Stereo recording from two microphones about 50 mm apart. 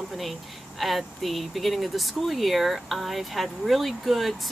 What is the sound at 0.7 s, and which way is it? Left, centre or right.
Speech, centre.